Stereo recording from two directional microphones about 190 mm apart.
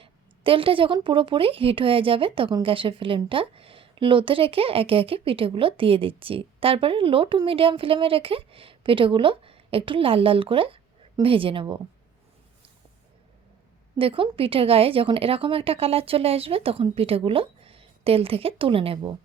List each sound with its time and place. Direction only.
0.0 s a woman's voice: 30° right (ahead or behind)
14.0 s a woman's voice: 30° right (ahead or behind)